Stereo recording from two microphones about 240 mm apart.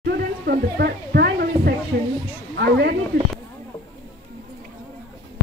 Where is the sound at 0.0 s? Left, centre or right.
Right.